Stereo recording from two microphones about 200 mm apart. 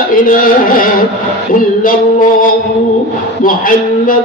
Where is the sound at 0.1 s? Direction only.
45° left (ahead or behind).